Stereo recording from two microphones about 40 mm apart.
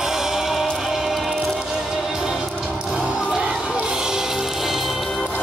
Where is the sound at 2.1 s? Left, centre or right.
Centre.